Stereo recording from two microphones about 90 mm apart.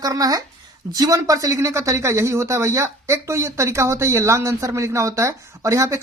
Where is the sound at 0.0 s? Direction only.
45° right (ahead or behind).